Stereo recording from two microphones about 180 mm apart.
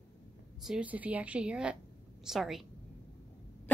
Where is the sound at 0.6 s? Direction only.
5° right (ahead or behind).